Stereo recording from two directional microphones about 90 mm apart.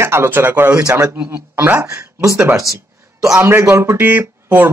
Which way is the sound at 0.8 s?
35° right (ahead or behind).